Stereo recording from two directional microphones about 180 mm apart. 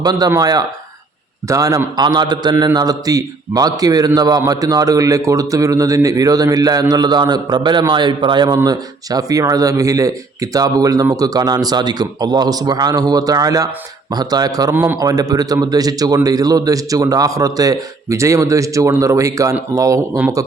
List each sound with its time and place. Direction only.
0.0 s a man's voice: 20° right (ahead or behind)